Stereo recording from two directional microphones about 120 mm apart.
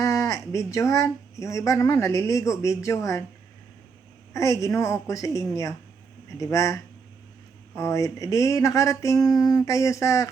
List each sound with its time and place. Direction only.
0.0 s speech: 25° left (ahead or behind)
4.4 s speech: 25° left (ahead or behind)